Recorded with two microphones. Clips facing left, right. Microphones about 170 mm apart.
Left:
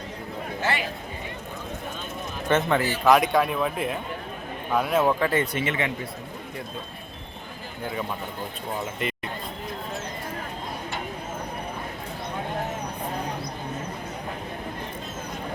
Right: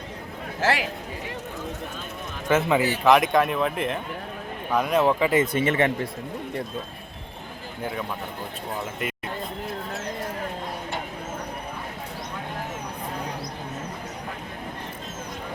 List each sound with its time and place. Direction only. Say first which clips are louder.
0.6 s a man's voice: right 4 dB; 90° right
2.5 s speech: right 2 dB; 5° right (ahead or behind)
5.6 s speech: right 5 dB; 40° right (ahead or behind)
9.0 s a sound: left 1 dB; 5° right (ahead or behind)